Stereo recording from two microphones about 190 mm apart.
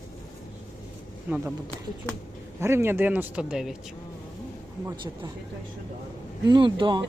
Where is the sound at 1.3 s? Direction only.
10° right (ahead or behind).